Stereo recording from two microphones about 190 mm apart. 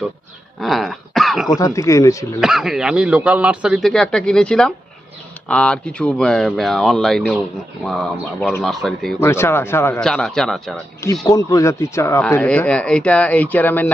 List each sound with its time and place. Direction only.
0.6 s throat clearing: centre (ahead or behind)
1.5 s speech: 20° left (ahead or behind)
2.4 s speech: centre (ahead or behind)
9.2 s speech: 15° left (ahead or behind)
11.3 s speech: 15° left (ahead or behind)